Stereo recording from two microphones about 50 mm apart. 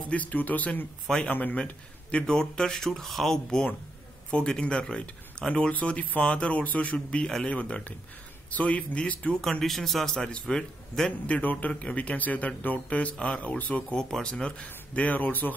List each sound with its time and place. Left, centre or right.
0.1 s speech: left
1.6 s speech: centre
5.7 s speech: left
9.3 s speech: centre
11.1 s speech: left
13.9 s speech: centre; by 15.5 s left